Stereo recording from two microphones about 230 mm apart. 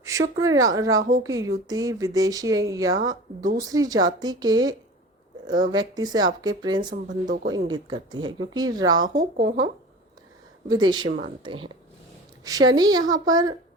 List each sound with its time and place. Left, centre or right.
0.0 s speech: centre
6.9 s speech: right
7.5 s speech: centre
9.4 s speech: right
10.7 s speech: centre